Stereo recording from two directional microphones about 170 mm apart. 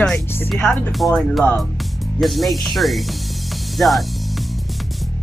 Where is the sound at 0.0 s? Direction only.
5° left (ahead or behind).